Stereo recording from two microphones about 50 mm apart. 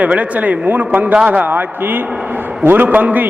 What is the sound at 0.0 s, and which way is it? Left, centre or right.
A man's voice, right.